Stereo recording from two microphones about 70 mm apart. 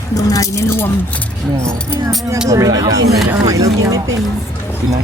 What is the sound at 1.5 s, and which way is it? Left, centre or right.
Speech, right.